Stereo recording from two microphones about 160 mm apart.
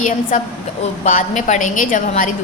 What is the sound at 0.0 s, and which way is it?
A woman's voice, 55° left (ahead or behind).